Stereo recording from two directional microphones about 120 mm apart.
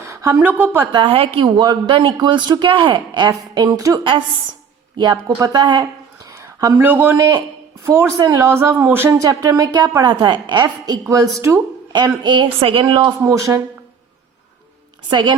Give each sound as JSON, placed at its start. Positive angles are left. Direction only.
{"t": 0.1, "sound": "a sound", "side_deg": -25}
{"t": 0.4, "sound": "speech", "side_deg": -15}
{"t": 0.9, "sound": "a woman's voice", "side_deg": -50}
{"t": 1.5, "sound": "a man's voice", "side_deg": -40}
{"t": 5.1, "sound": "a woman's voice", "side_deg": -30}
{"t": 6.8, "sound": "speech", "side_deg": -15}
{"t": 7.2, "sound": "a man's voice", "side_deg": -30}
{"t": 11.9, "sound": "a man's voice", "side_deg": -35}
{"t": 13.2, "sound": "a woman's voice", "side_deg": -25}
{"t": 15.1, "sound": "a man's voice", "side_deg": -40}